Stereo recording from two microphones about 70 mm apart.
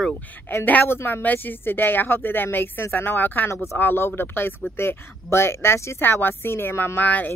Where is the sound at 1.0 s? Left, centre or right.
Left.